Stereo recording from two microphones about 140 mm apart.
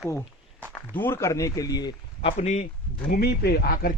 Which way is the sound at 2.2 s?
50° left (ahead or behind).